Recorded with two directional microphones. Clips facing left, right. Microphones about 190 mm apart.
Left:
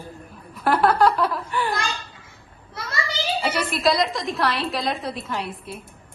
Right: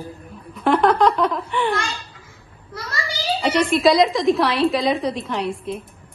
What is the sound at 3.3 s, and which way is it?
A woman's voice, 5° left (ahead or behind).